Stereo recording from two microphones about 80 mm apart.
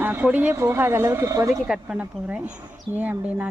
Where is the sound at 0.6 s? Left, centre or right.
Right.